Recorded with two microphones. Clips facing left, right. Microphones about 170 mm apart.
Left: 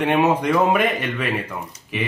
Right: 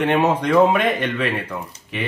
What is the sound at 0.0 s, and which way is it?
Speech, 10° left (ahead or behind).